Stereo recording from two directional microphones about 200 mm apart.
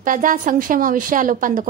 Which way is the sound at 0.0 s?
40° right (ahead or behind).